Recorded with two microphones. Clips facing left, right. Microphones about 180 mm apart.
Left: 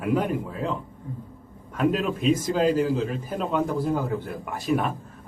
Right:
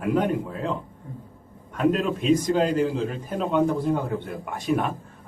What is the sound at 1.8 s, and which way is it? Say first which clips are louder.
Speech: right 1 dB; centre (ahead or behind).